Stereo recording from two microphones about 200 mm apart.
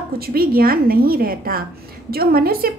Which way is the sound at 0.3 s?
50° right (ahead or behind).